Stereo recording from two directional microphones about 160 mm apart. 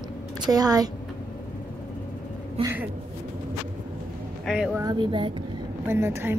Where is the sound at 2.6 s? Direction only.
35° right (ahead or behind).